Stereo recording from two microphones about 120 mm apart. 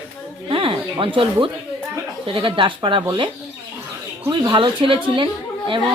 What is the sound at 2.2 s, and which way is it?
A man's voice, 45° right (ahead or behind).